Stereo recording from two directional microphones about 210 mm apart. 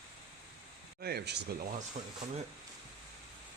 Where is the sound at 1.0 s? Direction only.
50° right (ahead or behind).